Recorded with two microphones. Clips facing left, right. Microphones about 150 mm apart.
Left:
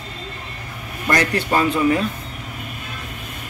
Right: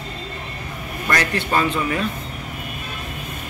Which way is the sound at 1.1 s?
30° left (ahead or behind).